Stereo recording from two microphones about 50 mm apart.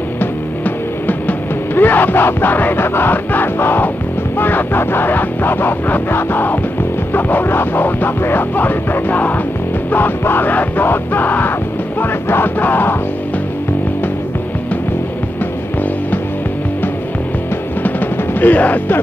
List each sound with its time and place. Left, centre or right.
0.2 s music: left
18.4 s music: left